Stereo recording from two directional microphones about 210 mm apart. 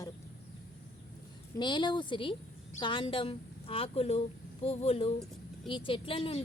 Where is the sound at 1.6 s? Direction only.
20° left (ahead or behind).